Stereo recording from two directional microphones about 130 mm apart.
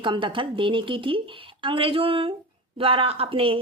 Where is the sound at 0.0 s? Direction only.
40° right (ahead or behind).